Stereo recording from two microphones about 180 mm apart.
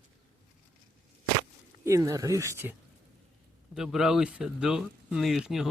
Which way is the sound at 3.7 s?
5° right (ahead or behind).